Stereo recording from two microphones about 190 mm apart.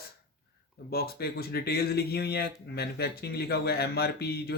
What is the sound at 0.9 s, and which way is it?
Speech, 55° left (ahead or behind).